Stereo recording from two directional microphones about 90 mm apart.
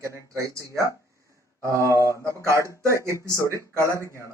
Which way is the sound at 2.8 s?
35° right (ahead or behind).